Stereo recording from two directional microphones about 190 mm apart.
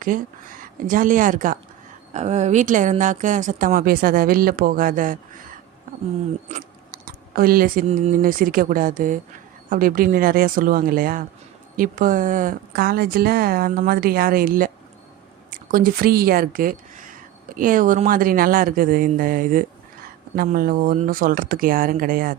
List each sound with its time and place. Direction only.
0.1 s speech: 45° right (ahead or behind)
6.5 s a sound: 50° right (ahead or behind)
7.9 s speech: 40° right (ahead or behind)